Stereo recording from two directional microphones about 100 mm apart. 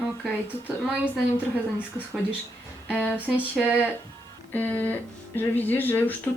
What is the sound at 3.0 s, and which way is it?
Speech, 20° left (ahead or behind).